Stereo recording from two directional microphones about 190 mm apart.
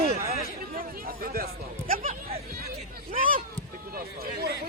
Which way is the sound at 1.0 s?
50° right (ahead or behind).